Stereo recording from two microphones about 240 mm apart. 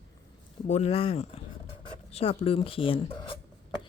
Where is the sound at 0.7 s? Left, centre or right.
Left.